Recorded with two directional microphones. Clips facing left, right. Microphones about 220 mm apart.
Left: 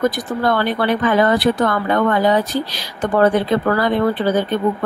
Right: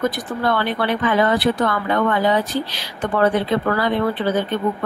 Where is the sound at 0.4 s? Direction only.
40° left (ahead or behind).